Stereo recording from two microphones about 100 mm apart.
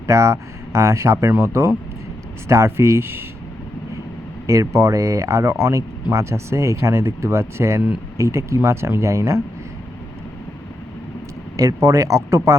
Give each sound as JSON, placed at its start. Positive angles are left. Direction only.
{"t": 0.1, "sound": "speech", "side_deg": -30}
{"t": 4.4, "sound": "speech", "side_deg": -30}
{"t": 11.5, "sound": "speech", "side_deg": -35}